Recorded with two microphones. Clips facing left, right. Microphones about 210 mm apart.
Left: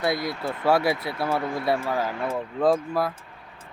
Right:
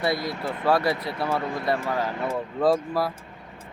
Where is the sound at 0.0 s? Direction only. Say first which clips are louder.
Even; centre (ahead or behind).